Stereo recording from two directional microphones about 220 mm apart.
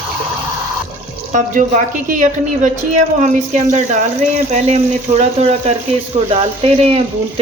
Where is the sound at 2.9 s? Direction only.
35° right (ahead or behind).